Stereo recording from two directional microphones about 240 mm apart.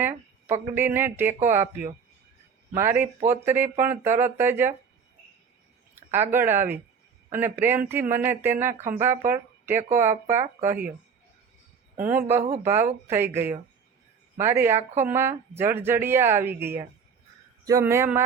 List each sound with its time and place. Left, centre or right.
0.0 s speech: centre
2.7 s speech: centre
5.9 s a sound: centre
6.3 s speech: centre
11.9 s speech: centre